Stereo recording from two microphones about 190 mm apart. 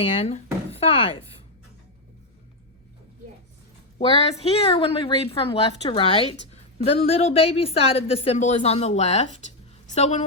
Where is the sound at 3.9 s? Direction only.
35° left (ahead or behind).